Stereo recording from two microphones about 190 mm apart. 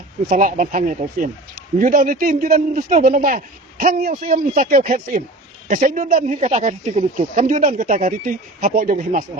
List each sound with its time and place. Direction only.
0.3 s speech: 45° right (ahead or behind)
5.8 s speech: 35° right (ahead or behind)